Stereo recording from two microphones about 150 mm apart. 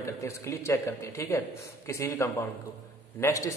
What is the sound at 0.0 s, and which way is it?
A man's voice, 20° left (ahead or behind).